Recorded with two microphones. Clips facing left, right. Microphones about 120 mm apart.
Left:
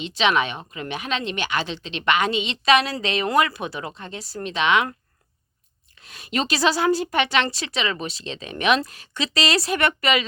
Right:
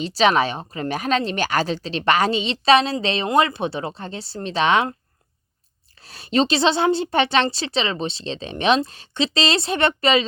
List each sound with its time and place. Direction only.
0.0 s a woman's voice: 35° right (ahead or behind)